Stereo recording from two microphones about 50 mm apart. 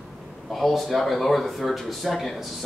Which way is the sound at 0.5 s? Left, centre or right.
Centre.